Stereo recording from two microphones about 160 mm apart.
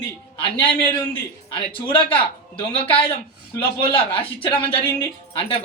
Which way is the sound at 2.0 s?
35° left (ahead or behind).